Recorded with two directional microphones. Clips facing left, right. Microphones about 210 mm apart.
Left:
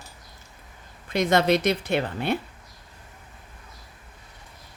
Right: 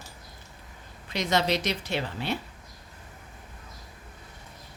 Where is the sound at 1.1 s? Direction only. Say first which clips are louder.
Left 6 dB; 55° left (ahead or behind).